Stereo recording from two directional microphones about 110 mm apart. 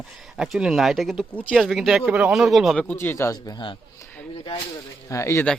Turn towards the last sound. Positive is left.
turn(degrees=25)  # may be behind; listen again after turning